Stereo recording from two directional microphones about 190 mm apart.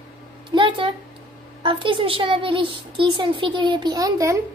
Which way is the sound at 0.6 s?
25° right (ahead or behind).